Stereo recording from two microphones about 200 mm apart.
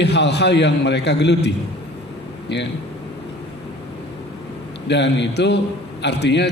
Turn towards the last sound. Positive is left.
turn(degrees=60)  # may be behind; listen again after turning